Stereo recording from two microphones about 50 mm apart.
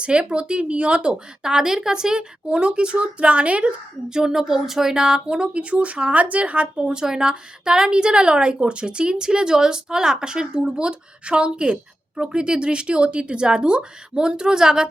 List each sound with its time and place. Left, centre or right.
0.0 s speech: centre
1.1 s a woman's voice: centre